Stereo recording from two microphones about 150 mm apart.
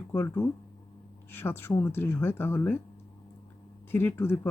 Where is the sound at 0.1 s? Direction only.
15° left (ahead or behind).